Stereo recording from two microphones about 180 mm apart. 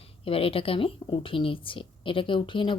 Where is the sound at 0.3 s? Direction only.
30° left (ahead or behind).